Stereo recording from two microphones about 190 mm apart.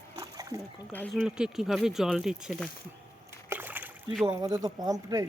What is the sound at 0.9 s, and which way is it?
Speech, 5° left (ahead or behind).